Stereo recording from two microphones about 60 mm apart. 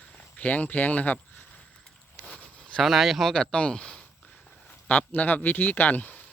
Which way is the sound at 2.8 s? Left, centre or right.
Centre.